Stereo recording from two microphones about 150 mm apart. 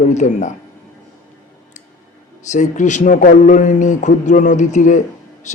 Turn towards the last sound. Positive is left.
turn(degrees=50)  # may be behind; listen again after turning